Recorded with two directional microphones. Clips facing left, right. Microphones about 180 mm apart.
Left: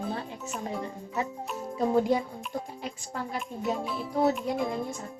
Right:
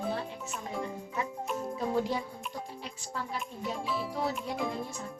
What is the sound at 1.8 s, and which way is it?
Speech, 45° left (ahead or behind).